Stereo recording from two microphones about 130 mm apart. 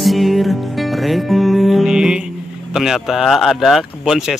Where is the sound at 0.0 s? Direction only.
Centre (ahead or behind).